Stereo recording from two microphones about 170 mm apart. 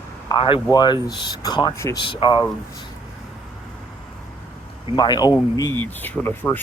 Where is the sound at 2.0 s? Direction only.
30° left (ahead or behind).